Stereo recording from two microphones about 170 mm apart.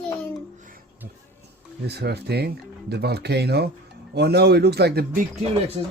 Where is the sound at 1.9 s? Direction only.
75° right (ahead or behind).